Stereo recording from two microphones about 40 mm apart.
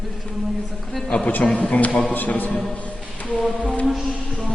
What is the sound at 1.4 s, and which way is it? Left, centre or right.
Speech, left.